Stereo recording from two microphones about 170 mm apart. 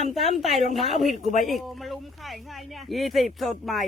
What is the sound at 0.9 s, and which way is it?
Speech, 45° left (ahead or behind).